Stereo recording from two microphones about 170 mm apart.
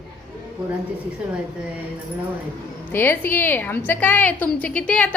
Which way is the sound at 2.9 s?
10° left (ahead or behind).